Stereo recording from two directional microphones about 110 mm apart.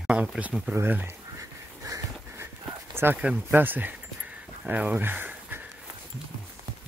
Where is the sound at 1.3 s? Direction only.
30° right (ahead or behind).